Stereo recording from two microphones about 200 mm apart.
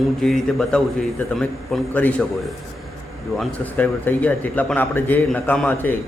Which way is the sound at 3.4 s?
5° left (ahead or behind).